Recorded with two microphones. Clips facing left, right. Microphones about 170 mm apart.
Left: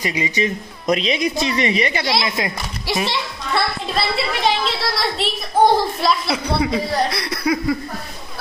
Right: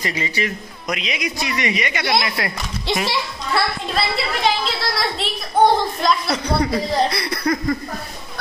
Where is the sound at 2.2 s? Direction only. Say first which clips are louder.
Left 2 dB; 20° left (ahead or behind).